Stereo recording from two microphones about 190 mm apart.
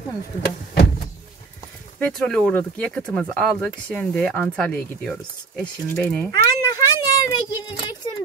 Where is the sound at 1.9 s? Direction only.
5° left (ahead or behind).